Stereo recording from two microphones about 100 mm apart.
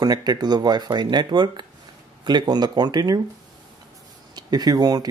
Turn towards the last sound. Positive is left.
turn(degrees=-40)  # may be behind; listen again after turning